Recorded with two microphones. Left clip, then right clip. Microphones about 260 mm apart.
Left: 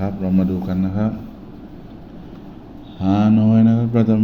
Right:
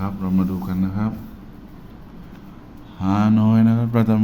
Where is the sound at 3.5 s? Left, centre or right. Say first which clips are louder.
Left 2 dB; centre.